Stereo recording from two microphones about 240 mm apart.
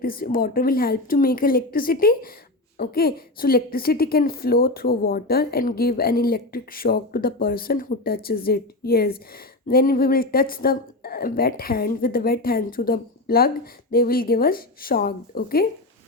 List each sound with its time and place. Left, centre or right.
0.0 s a woman's voice: left